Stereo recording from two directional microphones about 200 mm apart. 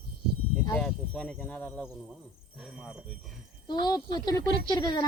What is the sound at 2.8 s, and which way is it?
Speech, 5° right (ahead or behind).